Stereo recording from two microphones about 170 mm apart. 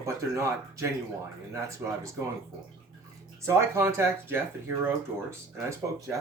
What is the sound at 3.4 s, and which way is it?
Speech, 15° right (ahead or behind).